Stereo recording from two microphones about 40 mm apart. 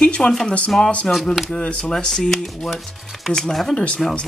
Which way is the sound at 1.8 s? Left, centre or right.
Centre.